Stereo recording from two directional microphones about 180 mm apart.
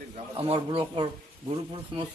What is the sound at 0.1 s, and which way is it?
A man's voice, 30° right (ahead or behind).